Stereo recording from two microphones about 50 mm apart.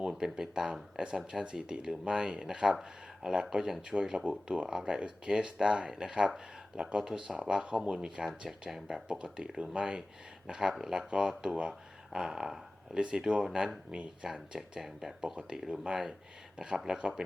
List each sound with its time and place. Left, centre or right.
0.0 s speech: centre
15.4 s speech: centre